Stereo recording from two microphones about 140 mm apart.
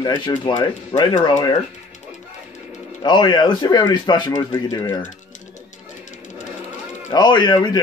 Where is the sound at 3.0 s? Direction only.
35° left (ahead or behind).